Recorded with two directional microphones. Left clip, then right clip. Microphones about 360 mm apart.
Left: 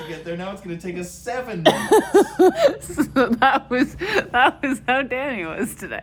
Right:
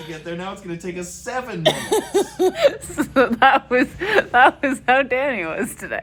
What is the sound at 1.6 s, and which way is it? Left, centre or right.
Cough, left.